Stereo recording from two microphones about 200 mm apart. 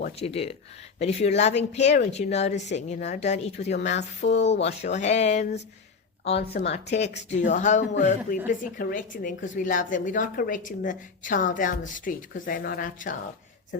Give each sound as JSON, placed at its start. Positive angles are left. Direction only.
{"t": 0.0, "sound": "a woman's voice", "side_deg": 30}
{"t": 4.2, "sound": "speech", "side_deg": 60}
{"t": 4.6, "sound": "a woman's voice", "side_deg": 35}
{"t": 6.6, "sound": "a woman's voice", "side_deg": 35}